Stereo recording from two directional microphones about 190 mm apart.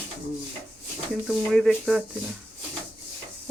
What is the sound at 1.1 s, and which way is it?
Speech, centre (ahead or behind).